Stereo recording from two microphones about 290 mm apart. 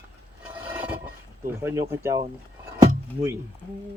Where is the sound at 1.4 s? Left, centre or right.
Centre.